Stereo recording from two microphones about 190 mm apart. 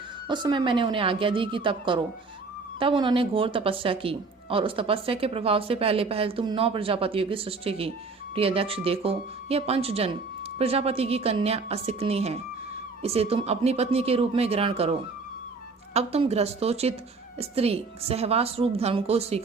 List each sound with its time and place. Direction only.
0.3 s a woman's voice: 25° right (ahead or behind)